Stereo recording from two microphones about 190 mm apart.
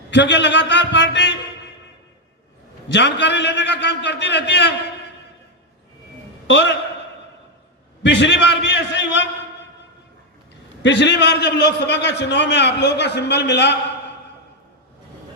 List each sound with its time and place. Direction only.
0.1 s a man's voice: 70° left (ahead or behind)
2.9 s a man's voice: 65° left (ahead or behind)
6.5 s a man's voice: 65° left (ahead or behind)
8.0 s a man's voice: 70° left (ahead or behind)
10.8 s a man's voice: 70° left (ahead or behind)